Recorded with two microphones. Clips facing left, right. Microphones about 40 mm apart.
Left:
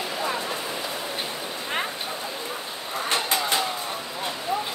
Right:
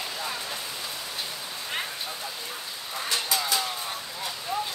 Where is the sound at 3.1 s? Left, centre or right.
Left.